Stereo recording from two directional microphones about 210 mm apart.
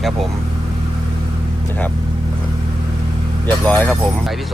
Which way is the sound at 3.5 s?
5° left (ahead or behind).